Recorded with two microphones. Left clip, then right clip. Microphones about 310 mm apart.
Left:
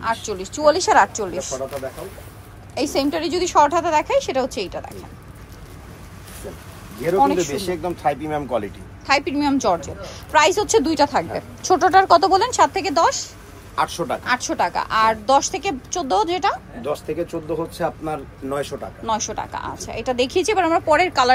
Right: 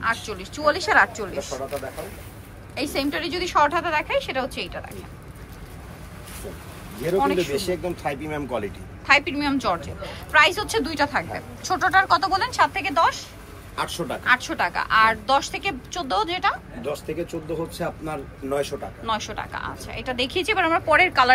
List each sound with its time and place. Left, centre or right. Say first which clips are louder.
0.0 s speech: left 2 dB; centre
2.7 s speech: left 5 dB; centre
7.2 s speech: left 4 dB; centre
7.5 s speech: left 1 dB; left
9.0 s a woman's voice: even; centre; by 18.8 s left
19.0 s speech: left 4 dB; centre